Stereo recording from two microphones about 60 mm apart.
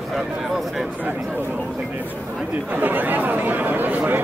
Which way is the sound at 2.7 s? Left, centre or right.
Right.